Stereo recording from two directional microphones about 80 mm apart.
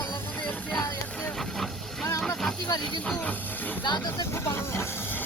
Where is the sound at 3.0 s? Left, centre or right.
Centre.